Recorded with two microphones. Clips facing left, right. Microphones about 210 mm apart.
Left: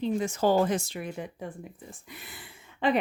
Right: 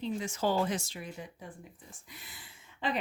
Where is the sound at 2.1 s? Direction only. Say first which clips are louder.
Left 7 dB; 60° left (ahead or behind).